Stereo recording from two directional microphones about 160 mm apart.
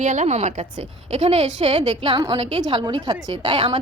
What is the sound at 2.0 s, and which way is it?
A woman's voice, 30° right (ahead or behind).